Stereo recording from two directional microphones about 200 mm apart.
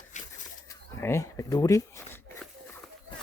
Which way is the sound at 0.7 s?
15° left (ahead or behind).